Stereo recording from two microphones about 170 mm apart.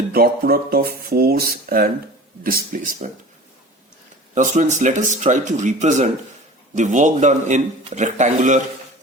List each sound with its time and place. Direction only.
0.1 s speech: 60° right (ahead or behind)
4.4 s a man's voice: 45° right (ahead or behind)